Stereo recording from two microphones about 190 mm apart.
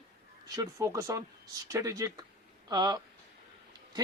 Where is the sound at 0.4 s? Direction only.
20° right (ahead or behind).